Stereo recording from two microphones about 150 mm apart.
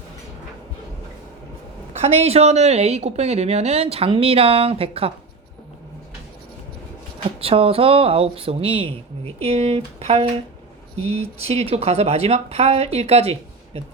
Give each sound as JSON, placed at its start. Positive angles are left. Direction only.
{"t": 1.9, "sound": "speech", "side_deg": -40}
{"t": 7.3, "sound": "speech", "side_deg": -40}